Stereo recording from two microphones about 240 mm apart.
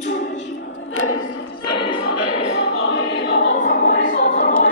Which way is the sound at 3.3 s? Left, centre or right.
Left.